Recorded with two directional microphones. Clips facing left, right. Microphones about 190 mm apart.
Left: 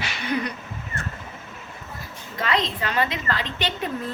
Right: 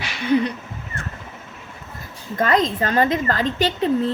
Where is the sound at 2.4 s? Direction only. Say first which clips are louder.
Right 6 dB; 45° right (ahead or behind).